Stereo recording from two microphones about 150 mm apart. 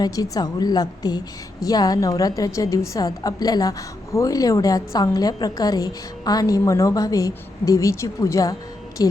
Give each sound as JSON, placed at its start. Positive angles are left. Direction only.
{"t": 0.0, "sound": "a woman's voice", "side_deg": 25}